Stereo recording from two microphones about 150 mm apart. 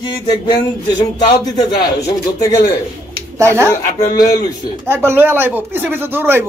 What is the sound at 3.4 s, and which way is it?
Speech, 20° right (ahead or behind).